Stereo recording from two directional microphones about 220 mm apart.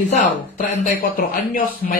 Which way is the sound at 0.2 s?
40° left (ahead or behind).